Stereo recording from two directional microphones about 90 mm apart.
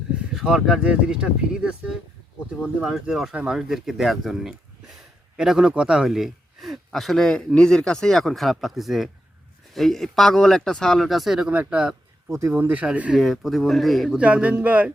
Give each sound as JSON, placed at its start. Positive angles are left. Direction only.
{"t": 0.3, "sound": "a man's voice", "side_deg": -5}
{"t": 13.1, "sound": "a man's voice", "side_deg": 0}
{"t": 14.2, "sound": "speech", "side_deg": -15}